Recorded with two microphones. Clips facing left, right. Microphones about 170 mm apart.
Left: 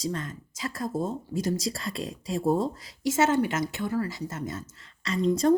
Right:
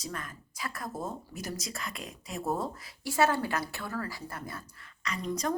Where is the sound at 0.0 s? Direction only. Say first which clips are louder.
Left 8 dB; 25° left (ahead or behind).